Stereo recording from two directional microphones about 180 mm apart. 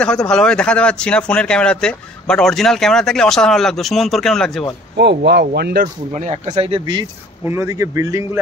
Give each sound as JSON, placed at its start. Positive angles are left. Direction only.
{"t": 0.3, "sound": "speech", "side_deg": 5}
{"t": 4.9, "sound": "speech", "side_deg": -70}
{"t": 6.1, "sound": "speech", "side_deg": -40}
{"t": 7.4, "sound": "speech", "side_deg": -15}